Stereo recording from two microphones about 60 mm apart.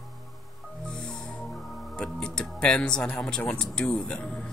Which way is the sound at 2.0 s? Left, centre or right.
Centre.